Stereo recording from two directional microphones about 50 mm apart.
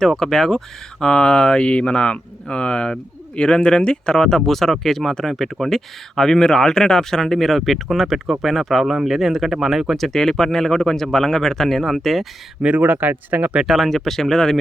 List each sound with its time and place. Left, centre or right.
0.2 s speech: centre
10.1 s speech: centre
12.8 s speech: right
13.7 s speech: centre